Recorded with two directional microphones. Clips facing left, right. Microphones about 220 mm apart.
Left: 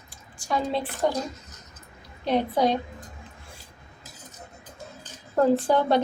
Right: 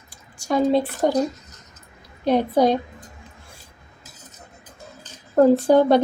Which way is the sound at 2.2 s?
45° right (ahead or behind).